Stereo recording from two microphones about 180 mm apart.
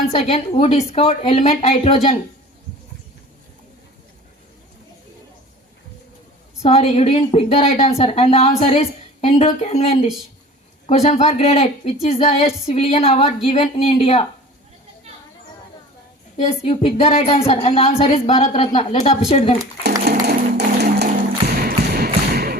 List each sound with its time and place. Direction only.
0.1 s a woman's voice: 35° left (ahead or behind)
6.6 s a woman's voice: 35° left (ahead or behind)
16.4 s a woman's voice: 35° left (ahead or behind)
20.1 s tap: 65° right (ahead or behind)
21.9 s bouncing: 60° right (ahead or behind)